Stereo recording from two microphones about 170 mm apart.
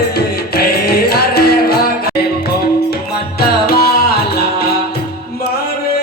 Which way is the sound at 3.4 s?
65° left (ahead or behind).